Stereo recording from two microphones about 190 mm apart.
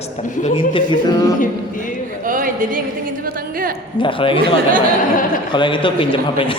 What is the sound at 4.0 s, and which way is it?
Speech, 25° left (ahead or behind).